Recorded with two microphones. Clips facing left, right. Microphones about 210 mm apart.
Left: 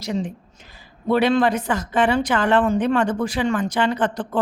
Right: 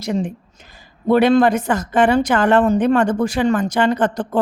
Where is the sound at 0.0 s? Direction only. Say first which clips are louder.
Right 4 dB; 50° right (ahead or behind).